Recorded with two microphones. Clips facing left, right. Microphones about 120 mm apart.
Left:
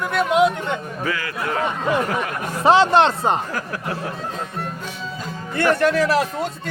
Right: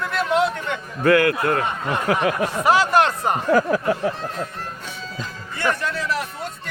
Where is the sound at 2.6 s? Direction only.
25° left (ahead or behind).